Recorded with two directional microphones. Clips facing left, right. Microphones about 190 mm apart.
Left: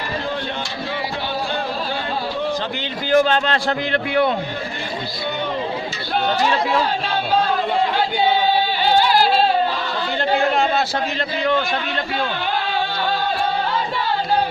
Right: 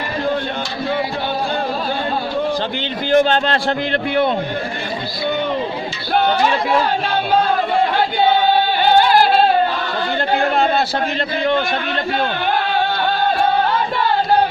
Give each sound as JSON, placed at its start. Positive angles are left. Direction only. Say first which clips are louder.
{"t": 3.1, "sound": "a man's voice", "louder": "right 2 dB", "side_deg": -25}
{"t": 7.9, "sound": "singing", "louder": "right 3 dB", "side_deg": -55}
{"t": 13.2, "sound": "music", "louder": "right 5 dB", "side_deg": -55}